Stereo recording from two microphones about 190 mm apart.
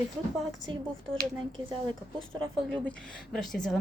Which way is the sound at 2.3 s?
5° left (ahead or behind).